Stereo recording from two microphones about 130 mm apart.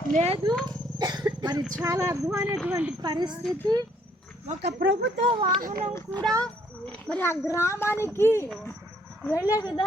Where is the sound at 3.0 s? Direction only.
35° right (ahead or behind).